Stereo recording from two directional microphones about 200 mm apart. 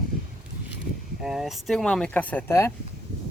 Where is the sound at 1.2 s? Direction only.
Centre (ahead or behind).